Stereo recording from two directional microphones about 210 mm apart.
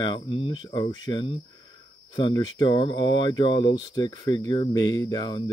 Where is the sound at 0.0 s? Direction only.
25° left (ahead or behind).